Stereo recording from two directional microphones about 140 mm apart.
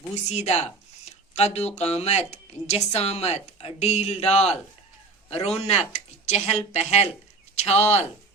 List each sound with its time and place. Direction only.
0.3 s speech: 50° left (ahead or behind)